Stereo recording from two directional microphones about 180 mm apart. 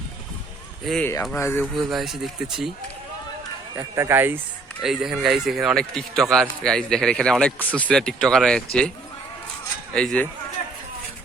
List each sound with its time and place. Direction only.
0.9 s speech: 5° left (ahead or behind)
1.8 s speech: centre (ahead or behind)
3.8 s speech: 15° right (ahead or behind); by 8.9 s 5° left (ahead or behind)
9.9 s speech: 5° left (ahead or behind)